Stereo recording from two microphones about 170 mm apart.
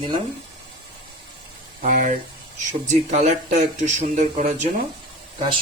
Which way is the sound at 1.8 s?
50° right (ahead or behind).